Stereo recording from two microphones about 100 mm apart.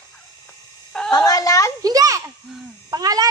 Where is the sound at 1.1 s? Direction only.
40° left (ahead or behind).